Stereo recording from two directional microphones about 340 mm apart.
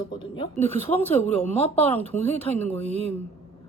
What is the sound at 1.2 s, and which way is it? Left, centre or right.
Speech, centre.